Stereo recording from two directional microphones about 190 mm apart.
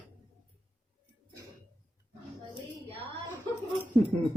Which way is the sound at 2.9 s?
30° right (ahead or behind).